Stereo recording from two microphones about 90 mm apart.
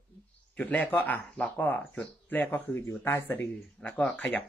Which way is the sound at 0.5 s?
20° left (ahead or behind).